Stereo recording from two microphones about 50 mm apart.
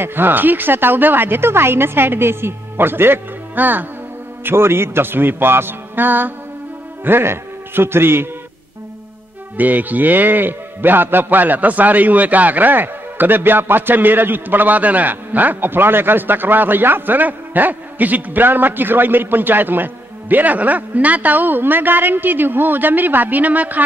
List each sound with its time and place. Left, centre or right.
0.0 s a woman's voice: right
4.5 s a woman's voice: right
9.6 s a man's voice: right